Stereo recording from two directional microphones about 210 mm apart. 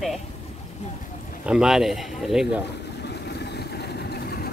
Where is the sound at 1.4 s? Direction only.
5° right (ahead or behind).